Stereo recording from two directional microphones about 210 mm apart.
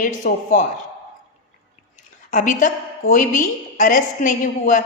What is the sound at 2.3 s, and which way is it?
A woman's voice, 40° left (ahead or behind).